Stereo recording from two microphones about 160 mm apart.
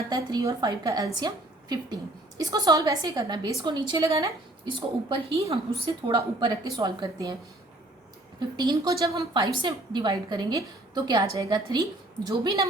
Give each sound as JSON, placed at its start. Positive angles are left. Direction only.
{"t": 0.1, "sound": "a woman's voice", "side_deg": -25}
{"t": 2.4, "sound": "a woman's voice", "side_deg": -25}
{"t": 8.4, "sound": "a woman's voice", "side_deg": -25}